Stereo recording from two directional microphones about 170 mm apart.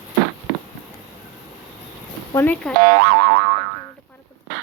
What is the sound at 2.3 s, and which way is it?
Speech, 10° left (ahead or behind).